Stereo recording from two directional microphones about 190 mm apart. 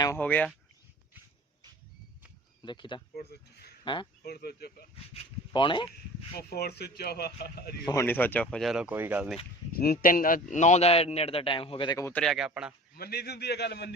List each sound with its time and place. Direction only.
0.0 s speech: 10° left (ahead or behind)
2.6 s speech: 25° left (ahead or behind)
3.2 s speech: 60° left (ahead or behind)
4.9 s speech: 30° left (ahead or behind)
6.3 s speech: 55° left (ahead or behind)
7.9 s speech: 15° left (ahead or behind); by 9.4 s 10° right (ahead or behind)
9.7 s a man's voice: 50° left (ahead or behind); by 12.2 s 15° left (ahead or behind)
12.2 s speech: centre (ahead or behind)
13.0 s speech: 55° left (ahead or behind)